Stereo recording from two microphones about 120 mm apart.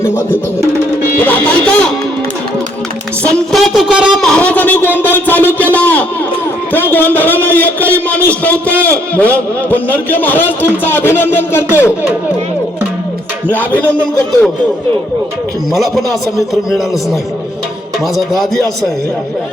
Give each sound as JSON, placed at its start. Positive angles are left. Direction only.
{"t": 0.0, "sound": "music", "side_deg": 20}
{"t": 1.2, "sound": "a man's voice", "side_deg": 10}
{"t": 3.2, "sound": "a woman's voice", "side_deg": 0}
{"t": 4.2, "sound": "a man's voice", "side_deg": 5}
{"t": 4.9, "sound": "a sound", "side_deg": 15}
{"t": 6.7, "sound": "a man's voice", "side_deg": 15}
{"t": 13.5, "sound": "a man's voice", "side_deg": 15}
{"t": 15.7, "sound": "a woman's voice", "side_deg": 0}
{"t": 18.2, "sound": "a woman's voice", "side_deg": 0}